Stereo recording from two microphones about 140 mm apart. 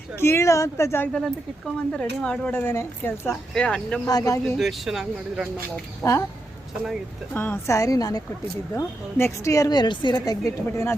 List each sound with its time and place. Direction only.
0.2 s a woman's voice: 20° left (ahead or behind)
1.1 s speech: 5° left (ahead or behind)
3.5 s speech: 5° left (ahead or behind)
4.0 s a woman's voice: 25° left (ahead or behind)
4.4 s speech: centre (ahead or behind)
5.7 s speech: 15° left (ahead or behind)
7.3 s a woman's voice: 15° left (ahead or behind)